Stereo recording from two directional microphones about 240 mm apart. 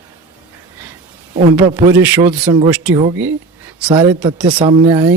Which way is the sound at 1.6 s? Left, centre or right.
Centre.